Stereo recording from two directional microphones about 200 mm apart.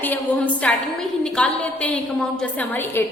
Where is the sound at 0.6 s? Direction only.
5° left (ahead or behind).